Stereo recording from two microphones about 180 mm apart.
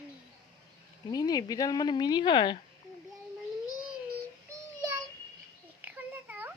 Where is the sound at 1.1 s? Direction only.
20° left (ahead or behind).